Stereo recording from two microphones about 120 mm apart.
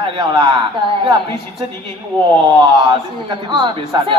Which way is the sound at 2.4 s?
40° right (ahead or behind).